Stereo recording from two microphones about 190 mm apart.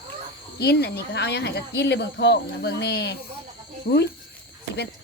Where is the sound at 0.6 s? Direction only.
60° left (ahead or behind).